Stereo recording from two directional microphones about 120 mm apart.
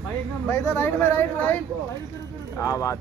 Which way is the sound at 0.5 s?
20° left (ahead or behind).